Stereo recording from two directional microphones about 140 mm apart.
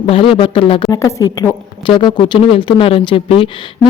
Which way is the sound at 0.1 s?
40° left (ahead or behind).